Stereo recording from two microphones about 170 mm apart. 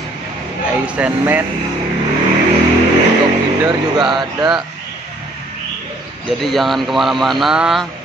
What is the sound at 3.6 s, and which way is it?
Speech, 25° right (ahead or behind).